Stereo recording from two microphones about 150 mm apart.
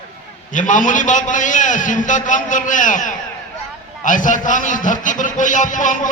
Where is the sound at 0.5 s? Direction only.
60° left (ahead or behind).